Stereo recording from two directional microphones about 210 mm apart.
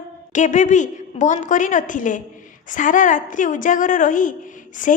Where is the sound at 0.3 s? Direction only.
35° left (ahead or behind).